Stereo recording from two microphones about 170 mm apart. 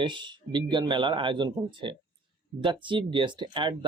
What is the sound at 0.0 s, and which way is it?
Speech, 30° right (ahead or behind).